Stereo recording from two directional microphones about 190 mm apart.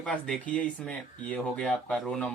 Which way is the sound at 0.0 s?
5° left (ahead or behind).